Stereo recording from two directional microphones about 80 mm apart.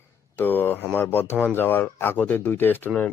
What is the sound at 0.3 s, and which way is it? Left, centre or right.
Speech, left.